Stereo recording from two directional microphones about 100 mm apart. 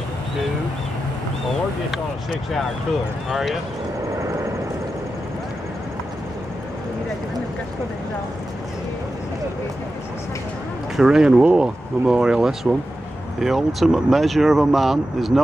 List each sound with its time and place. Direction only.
3.3 s speech: 5° right (ahead or behind)
4.2 s vehicle: 30° right (ahead or behind)
11.0 s speech: 5° right (ahead or behind)